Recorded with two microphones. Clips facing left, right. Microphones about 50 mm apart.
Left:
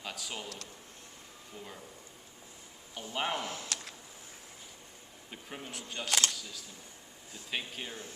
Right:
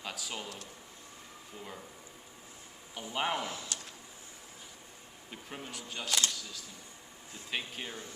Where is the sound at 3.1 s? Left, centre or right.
Centre.